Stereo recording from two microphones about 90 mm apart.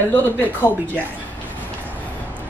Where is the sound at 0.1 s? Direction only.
20° left (ahead or behind).